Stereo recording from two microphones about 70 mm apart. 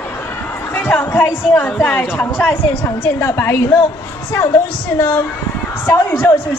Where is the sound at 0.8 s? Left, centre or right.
Left.